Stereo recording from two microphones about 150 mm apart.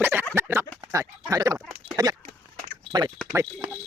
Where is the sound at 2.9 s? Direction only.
25° right (ahead or behind).